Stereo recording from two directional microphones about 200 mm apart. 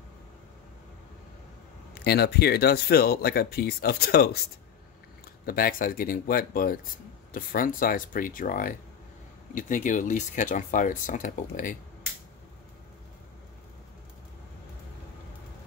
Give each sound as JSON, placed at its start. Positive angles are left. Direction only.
{"t": 2.0, "sound": "speech", "side_deg": 55}
{"t": 5.4, "sound": "speech", "side_deg": 45}